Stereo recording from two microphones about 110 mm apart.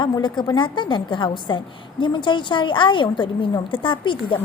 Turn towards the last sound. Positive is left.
turn(degrees=50)  # may be behind; listen again after turning